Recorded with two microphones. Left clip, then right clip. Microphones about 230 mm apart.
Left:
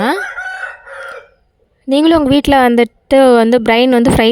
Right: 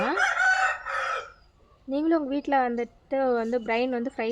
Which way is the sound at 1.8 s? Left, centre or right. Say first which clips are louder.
Left 15 dB; left.